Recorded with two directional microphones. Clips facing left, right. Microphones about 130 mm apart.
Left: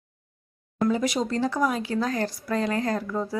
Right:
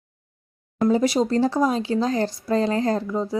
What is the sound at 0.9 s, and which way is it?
Speech, 30° right (ahead or behind).